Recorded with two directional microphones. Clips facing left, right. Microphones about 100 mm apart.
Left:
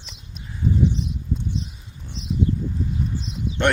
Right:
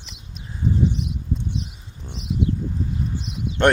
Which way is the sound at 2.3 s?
Centre (ahead or behind).